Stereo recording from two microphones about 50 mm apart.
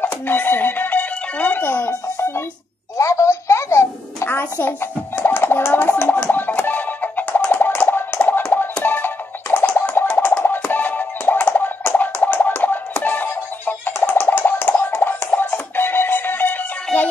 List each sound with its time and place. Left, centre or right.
0.0 s music: left
3.0 s music: left
4.3 s music: left
11.5 s a sound: left
12.0 s music: left